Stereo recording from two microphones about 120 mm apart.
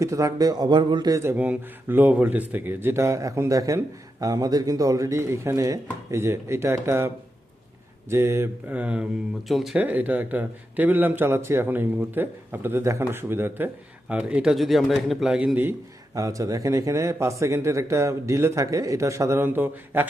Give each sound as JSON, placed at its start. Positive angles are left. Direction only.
{"t": 0.0, "sound": "speech", "side_deg": -25}
{"t": 1.2, "sound": "a man's voice", "side_deg": -15}
{"t": 8.1, "sound": "a man's voice", "side_deg": -25}
{"t": 8.7, "sound": "a man's voice", "side_deg": -10}
{"t": 9.5, "sound": "speech", "side_deg": 0}
{"t": 9.7, "sound": "a man's voice", "side_deg": -15}
{"t": 16.1, "sound": "a man's voice", "side_deg": -25}